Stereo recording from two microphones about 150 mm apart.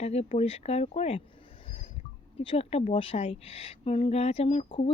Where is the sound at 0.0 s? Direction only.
45° left (ahead or behind).